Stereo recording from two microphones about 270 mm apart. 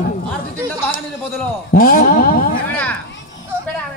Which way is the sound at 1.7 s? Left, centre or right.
Left.